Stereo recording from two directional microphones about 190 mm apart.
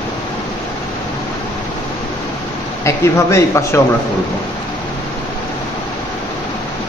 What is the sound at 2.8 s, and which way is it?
Speech, 15° left (ahead or behind).